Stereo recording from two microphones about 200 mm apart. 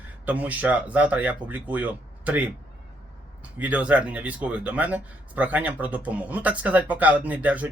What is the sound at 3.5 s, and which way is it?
Speech, 5° right (ahead or behind).